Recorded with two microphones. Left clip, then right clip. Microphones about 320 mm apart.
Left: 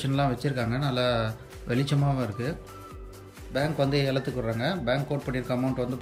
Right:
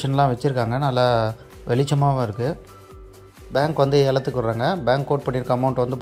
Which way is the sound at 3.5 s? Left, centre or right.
Centre.